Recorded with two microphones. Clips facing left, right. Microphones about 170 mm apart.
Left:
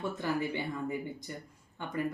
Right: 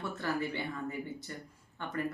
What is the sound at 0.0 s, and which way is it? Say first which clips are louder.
Speech: left 2 dB; 15° left (ahead or behind).